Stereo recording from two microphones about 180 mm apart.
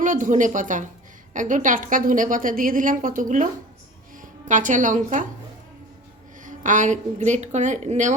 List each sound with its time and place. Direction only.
0.0 s a woman's voice: 45° right (ahead or behind)
6.4 s a woman's voice: 45° right (ahead or behind)